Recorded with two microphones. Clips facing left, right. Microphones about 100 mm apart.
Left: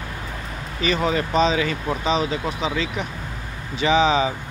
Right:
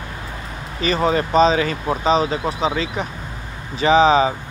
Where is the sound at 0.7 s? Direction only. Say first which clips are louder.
Right 3 dB; 40° right (ahead or behind).